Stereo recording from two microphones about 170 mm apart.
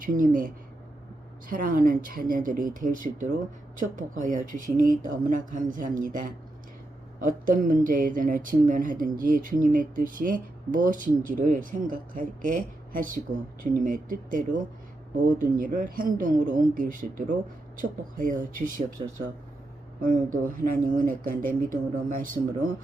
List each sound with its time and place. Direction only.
0.0 s speech: 55° right (ahead or behind)
20.0 s speech: 50° right (ahead or behind)